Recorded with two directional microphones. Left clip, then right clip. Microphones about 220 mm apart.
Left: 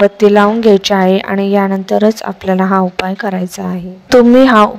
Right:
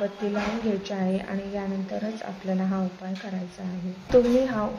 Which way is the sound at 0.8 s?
45° left (ahead or behind).